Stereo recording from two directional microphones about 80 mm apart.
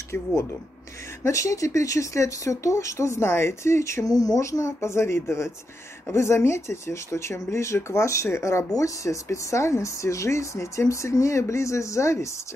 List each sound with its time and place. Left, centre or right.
1.2 s speech: left
4.0 s speech: left